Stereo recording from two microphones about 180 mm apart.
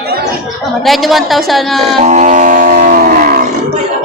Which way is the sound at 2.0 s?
45° right (ahead or behind).